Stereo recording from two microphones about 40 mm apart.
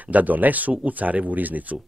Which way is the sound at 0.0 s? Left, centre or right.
Right.